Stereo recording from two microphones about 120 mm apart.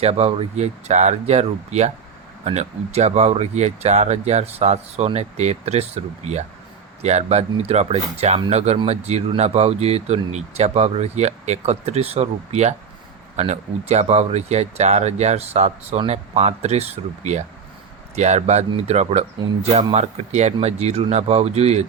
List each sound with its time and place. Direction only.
0.0 s speech: 60° right (ahead or behind)